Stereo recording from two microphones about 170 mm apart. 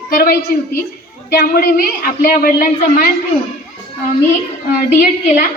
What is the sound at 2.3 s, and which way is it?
Speech, 60° left (ahead or behind).